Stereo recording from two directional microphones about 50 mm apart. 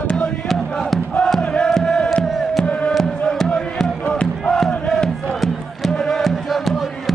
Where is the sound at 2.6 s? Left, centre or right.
Left.